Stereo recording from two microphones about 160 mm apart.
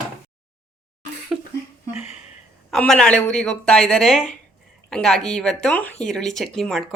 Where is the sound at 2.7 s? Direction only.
5° left (ahead or behind).